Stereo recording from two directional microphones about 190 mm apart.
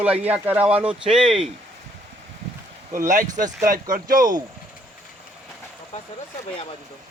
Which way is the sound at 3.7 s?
45° right (ahead or behind).